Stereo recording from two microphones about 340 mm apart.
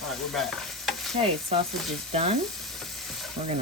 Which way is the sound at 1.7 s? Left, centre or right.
Centre.